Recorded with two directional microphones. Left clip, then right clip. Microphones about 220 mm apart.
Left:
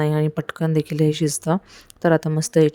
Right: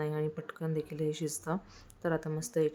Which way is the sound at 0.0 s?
40° left (ahead or behind).